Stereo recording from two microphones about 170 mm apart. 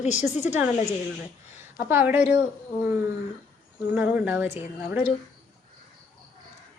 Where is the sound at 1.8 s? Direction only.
10° right (ahead or behind).